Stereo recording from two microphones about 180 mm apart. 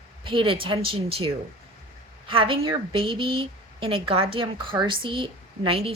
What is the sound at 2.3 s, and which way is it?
A woman's voice, 30° right (ahead or behind).